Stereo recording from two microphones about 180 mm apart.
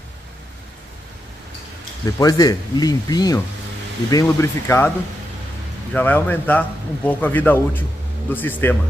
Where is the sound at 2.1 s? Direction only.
20° left (ahead or behind).